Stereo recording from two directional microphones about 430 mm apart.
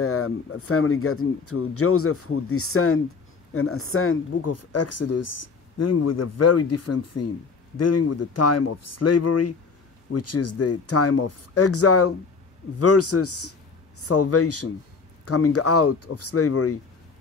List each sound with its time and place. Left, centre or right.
0.0 s speech: left